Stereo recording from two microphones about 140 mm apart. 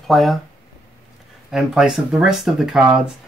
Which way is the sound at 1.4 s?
5° right (ahead or behind).